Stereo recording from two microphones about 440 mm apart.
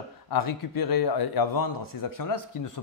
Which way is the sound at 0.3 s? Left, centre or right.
Left.